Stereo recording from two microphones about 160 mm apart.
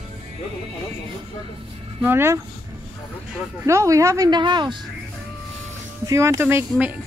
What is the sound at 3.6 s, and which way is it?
Speech, 20° right (ahead or behind).